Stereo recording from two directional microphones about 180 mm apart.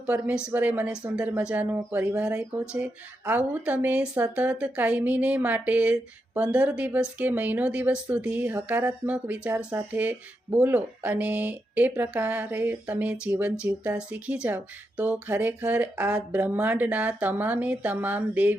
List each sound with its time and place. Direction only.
0.0 s speech: 5° right (ahead or behind)